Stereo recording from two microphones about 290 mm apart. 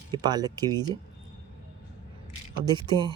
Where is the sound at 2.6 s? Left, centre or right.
Centre.